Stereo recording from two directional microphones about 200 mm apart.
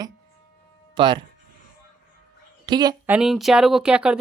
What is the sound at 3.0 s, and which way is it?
Speech, 5° right (ahead or behind).